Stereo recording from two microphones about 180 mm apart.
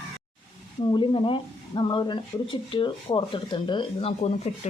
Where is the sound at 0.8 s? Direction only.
25° left (ahead or behind).